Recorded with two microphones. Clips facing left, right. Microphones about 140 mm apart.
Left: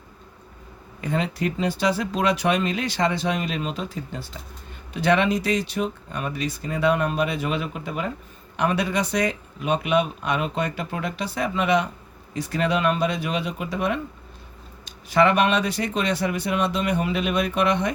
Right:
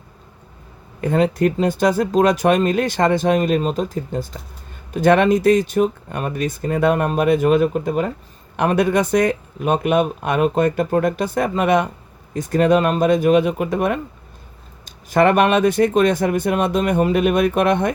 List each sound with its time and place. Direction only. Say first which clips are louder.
1.0 s speech: right 8 dB; 50° right (ahead or behind)